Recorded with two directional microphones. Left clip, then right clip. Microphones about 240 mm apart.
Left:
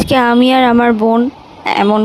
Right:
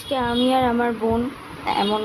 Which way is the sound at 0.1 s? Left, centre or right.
Left.